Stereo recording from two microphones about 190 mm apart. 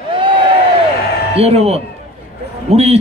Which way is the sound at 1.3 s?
35° right (ahead or behind).